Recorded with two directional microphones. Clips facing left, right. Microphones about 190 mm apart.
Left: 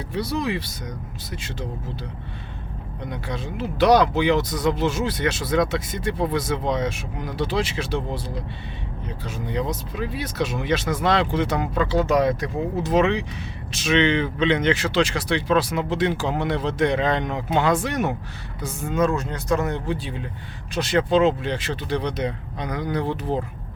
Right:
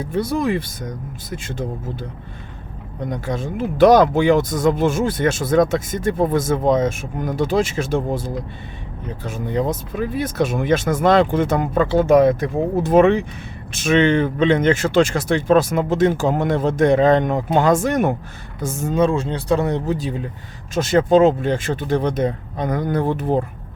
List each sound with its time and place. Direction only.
0.0 s speech: 50° right (ahead or behind)
3.1 s speech: 45° right (ahead or behind)
18.9 s speech: 30° right (ahead or behind); by 23.4 s 55° right (ahead or behind)